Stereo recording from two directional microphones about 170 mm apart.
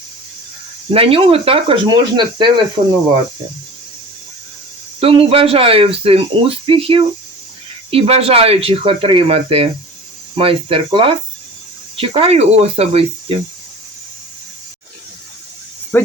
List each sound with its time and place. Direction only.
0.9 s speech: 35° right (ahead or behind)
4.9 s speech: 35° right (ahead or behind)
15.9 s speech: 10° left (ahead or behind)